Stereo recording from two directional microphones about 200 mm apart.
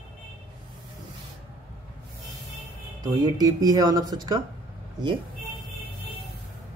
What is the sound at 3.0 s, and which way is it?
A man's voice, 20° right (ahead or behind).